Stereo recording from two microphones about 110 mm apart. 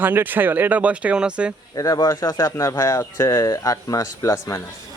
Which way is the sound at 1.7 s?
35° left (ahead or behind).